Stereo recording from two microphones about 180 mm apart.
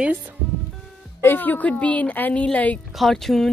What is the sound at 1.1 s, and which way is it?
Speech, 10° left (ahead or behind).